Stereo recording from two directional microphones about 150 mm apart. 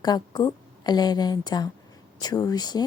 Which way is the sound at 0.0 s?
30° left (ahead or behind).